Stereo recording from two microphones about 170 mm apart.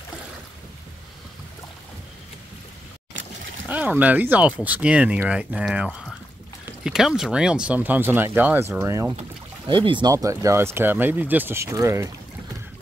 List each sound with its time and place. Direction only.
3.6 s speech: 10° right (ahead or behind)
9.7 s speech: 30° right (ahead or behind)